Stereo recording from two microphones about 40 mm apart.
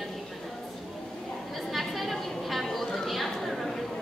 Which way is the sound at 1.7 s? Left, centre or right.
Centre.